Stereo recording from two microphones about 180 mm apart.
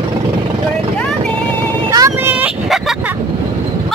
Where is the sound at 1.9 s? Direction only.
20° right (ahead or behind).